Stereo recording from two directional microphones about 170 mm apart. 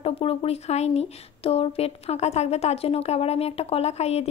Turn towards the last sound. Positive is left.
turn(degrees=40)  # may be behind; listen again after turning